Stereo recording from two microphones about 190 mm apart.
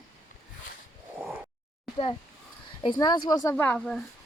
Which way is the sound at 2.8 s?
25° left (ahead or behind).